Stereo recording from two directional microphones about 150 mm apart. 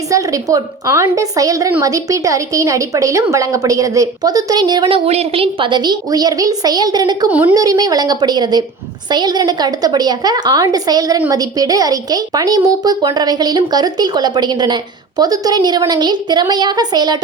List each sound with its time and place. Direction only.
0.1 s a woman's voice: 20° right (ahead or behind)
7.3 s a woman's voice: 10° right (ahead or behind)
7.5 s a woman's voice: 25° right (ahead or behind)